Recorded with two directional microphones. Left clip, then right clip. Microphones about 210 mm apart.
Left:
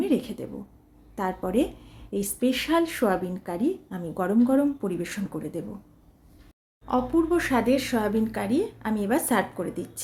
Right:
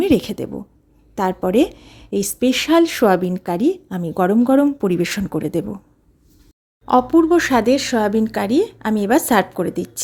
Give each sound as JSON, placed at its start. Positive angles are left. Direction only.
{"t": 0.0, "sound": "a woman's voice", "side_deg": -45}
{"t": 6.8, "sound": "a woman's voice", "side_deg": -40}